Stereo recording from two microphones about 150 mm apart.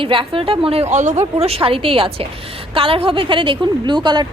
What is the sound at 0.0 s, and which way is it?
A woman's voice, 35° right (ahead or behind).